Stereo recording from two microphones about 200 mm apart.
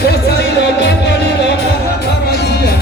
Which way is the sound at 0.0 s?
55° left (ahead or behind).